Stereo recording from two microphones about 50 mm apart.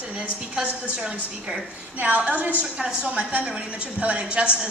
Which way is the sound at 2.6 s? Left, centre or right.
Centre.